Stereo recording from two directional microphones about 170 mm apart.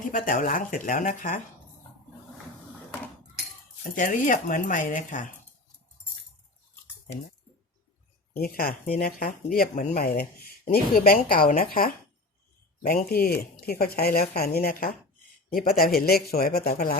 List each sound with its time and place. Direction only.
0.0 s speech: 50° left (ahead or behind)
3.9 s speech: 50° left (ahead or behind)
8.4 s speech: 60° left (ahead or behind)
10.0 s speech: 65° left (ahead or behind)